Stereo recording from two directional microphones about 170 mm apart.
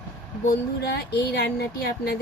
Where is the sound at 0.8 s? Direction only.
70° left (ahead or behind).